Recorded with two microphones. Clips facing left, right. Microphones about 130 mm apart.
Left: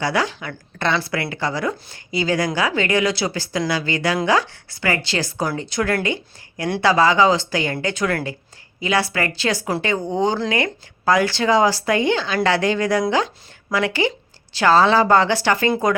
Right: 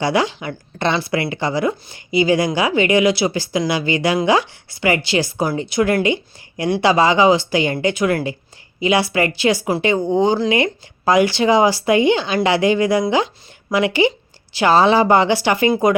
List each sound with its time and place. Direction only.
0.0 s speech: 20° right (ahead or behind)